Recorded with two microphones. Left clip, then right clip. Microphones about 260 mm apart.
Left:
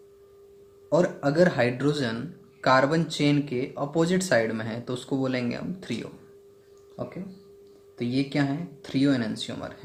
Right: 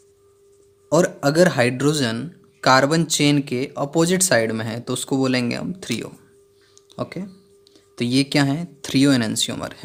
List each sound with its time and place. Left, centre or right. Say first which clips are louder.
0.9 s speech: right 5 dB; right